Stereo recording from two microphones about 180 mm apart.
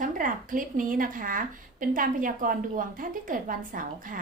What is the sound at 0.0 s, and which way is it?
A woman's voice, 45° right (ahead or behind).